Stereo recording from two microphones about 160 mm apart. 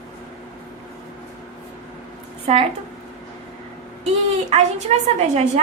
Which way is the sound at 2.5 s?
40° right (ahead or behind).